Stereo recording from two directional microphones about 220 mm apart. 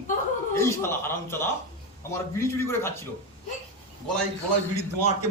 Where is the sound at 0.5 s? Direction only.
10° left (ahead or behind).